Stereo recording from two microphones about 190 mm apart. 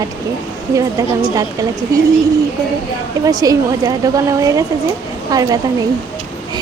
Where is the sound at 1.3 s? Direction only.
20° right (ahead or behind).